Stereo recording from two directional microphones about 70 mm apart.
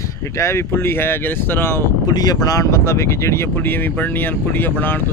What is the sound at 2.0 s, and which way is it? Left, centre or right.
Speech, left.